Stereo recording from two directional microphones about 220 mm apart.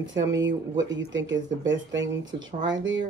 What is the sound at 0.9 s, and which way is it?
Speech, 55° right (ahead or behind).